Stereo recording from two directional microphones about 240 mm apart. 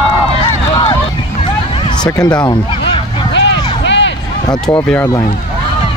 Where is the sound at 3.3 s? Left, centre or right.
Left.